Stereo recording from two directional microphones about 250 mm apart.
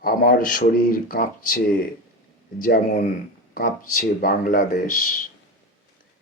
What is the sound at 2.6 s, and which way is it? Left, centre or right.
Speech, left.